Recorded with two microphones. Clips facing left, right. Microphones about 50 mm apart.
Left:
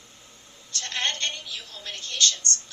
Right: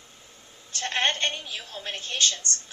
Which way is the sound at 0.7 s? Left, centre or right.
Right.